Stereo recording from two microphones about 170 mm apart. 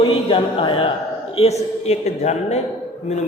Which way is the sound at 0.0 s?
35° left (ahead or behind).